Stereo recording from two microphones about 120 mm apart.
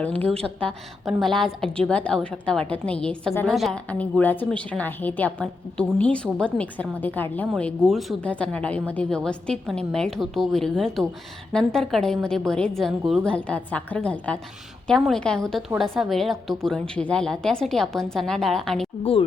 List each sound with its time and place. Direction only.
0.0 s a woman's voice: 10° left (ahead or behind)
7.5 s a woman's voice: centre (ahead or behind)